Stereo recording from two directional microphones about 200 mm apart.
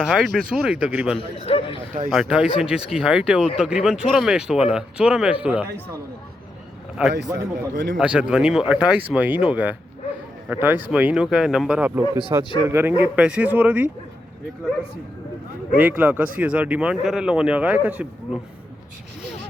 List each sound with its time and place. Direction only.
0.0 s speech: centre (ahead or behind)
1.2 s a man's voice: 30° left (ahead or behind)
2.0 s speech: 5° right (ahead or behind)
7.0 s speech: 5° right (ahead or behind)
7.7 s a man's voice: 65° right (ahead or behind)
7.9 s speech: 5° right (ahead or behind)
15.8 s speech: 10° right (ahead or behind)